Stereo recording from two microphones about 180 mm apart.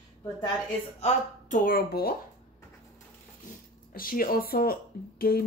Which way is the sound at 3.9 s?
55° left (ahead or behind).